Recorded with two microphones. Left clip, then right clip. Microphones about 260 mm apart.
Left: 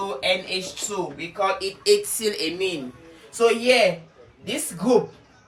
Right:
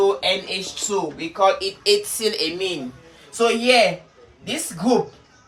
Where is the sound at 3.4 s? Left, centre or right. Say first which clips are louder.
Right 2 dB; centre.